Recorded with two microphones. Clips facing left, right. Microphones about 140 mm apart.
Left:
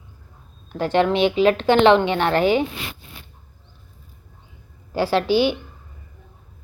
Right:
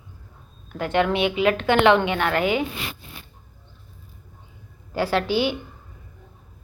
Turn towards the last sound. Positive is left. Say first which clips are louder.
# left 4 dB
turn(degrees=25)  # may be behind; listen again after turning